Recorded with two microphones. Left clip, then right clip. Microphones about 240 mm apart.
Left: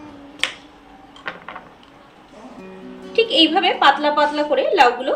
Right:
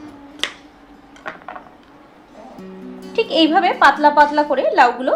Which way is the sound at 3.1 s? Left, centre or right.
Centre.